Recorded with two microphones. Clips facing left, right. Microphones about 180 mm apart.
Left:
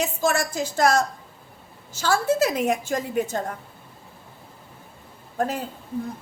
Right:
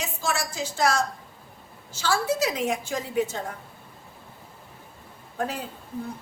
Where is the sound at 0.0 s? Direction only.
55° left (ahead or behind).